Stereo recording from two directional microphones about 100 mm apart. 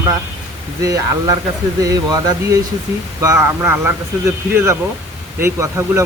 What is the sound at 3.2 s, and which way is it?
Speech, 30° right (ahead or behind).